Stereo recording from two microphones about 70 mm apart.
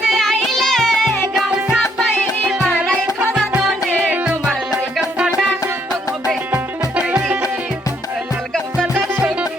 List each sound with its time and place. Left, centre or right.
0.0 s music: centre
5.1 s music: centre
6.5 s music: centre
9.2 s music: centre